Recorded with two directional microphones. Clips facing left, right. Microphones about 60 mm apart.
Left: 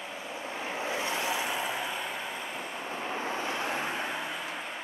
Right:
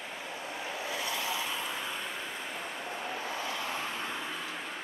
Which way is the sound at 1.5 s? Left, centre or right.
Centre.